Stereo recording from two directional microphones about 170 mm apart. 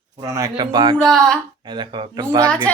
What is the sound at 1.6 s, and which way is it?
Speech, 30° right (ahead or behind).